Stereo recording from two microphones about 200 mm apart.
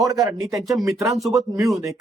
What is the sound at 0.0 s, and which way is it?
Speech, 15° right (ahead or behind).